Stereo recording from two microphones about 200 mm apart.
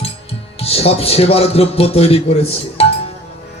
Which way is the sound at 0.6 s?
30° left (ahead or behind).